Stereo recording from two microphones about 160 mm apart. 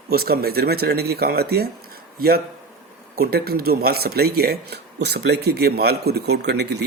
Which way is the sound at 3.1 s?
70° right (ahead or behind).